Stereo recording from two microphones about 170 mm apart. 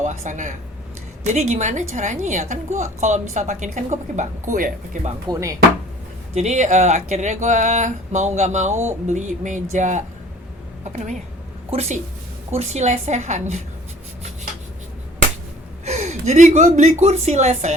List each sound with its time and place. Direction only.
0.0 s a woman's voice: 45° right (ahead or behind)
5.3 s speech: 20° right (ahead or behind)
6.3 s a woman's voice: 45° right (ahead or behind)
15.8 s a woman's voice: 40° right (ahead or behind)